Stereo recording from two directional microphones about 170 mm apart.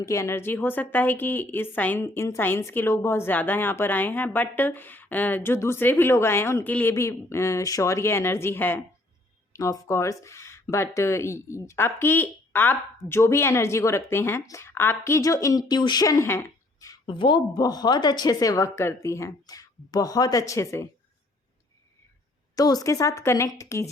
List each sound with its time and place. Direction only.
0.0 s a woman's voice: 15° left (ahead or behind)
17.1 s speech: 30° left (ahead or behind)
22.5 s a woman's voice: 20° left (ahead or behind)